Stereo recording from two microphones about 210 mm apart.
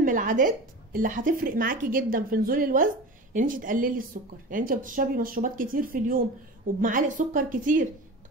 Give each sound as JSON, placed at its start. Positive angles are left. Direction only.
{"t": 0.0, "sound": "a woman's voice", "side_deg": -40}